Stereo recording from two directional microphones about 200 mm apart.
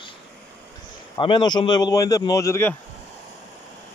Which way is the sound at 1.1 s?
25° left (ahead or behind).